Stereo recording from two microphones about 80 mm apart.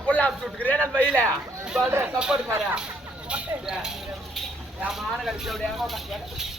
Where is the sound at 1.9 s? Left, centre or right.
Right.